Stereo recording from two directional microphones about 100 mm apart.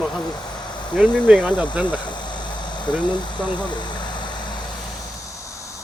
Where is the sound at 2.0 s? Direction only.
50° left (ahead or behind).